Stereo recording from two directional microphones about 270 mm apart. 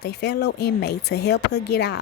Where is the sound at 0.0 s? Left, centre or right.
Left.